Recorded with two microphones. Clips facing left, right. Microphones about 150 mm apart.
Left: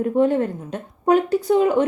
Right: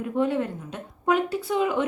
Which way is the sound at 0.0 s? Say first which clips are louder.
Left 6 dB; 45° left (ahead or behind).